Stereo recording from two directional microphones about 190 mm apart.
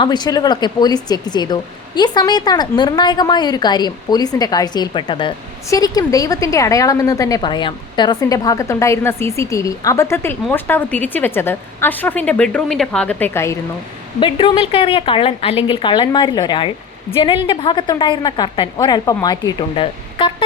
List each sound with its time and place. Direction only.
0.0 s a woman's voice: 20° left (ahead or behind)
14.2 s a woman's voice: 25° left (ahead or behind)